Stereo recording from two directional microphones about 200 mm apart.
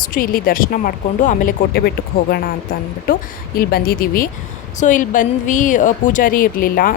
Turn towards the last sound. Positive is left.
turn(degrees=45)  # may be behind; listen again after turning